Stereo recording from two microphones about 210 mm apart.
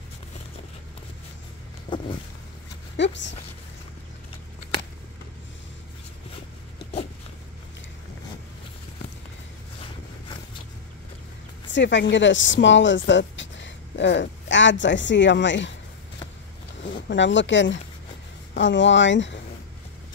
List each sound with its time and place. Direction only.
1.9 s vehicle: 20° left (ahead or behind)
3.0 s speech: 60° left (ahead or behind)
11.7 s speech: 60° left (ahead or behind)
17.1 s speech: 60° left (ahead or behind)